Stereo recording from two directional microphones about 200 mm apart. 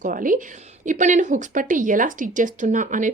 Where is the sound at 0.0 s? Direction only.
40° right (ahead or behind).